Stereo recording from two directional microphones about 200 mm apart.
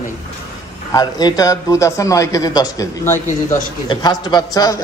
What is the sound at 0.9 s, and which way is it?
A man's voice, 20° left (ahead or behind).